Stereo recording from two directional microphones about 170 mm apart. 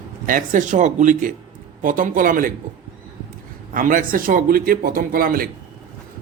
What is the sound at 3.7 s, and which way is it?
A man's voice, 55° right (ahead or behind).